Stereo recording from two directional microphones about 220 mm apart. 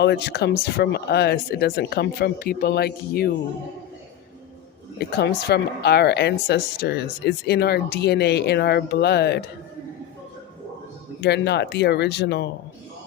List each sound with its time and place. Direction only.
0.0 s speech: 50° left (ahead or behind)
4.9 s speech: 50° left (ahead or behind)
11.2 s speech: 50° left (ahead or behind)